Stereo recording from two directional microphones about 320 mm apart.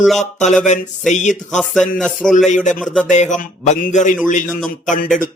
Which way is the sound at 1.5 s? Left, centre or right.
Centre.